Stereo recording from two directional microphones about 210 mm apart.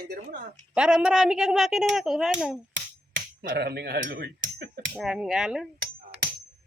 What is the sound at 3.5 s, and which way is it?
Speech, 50° right (ahead or behind).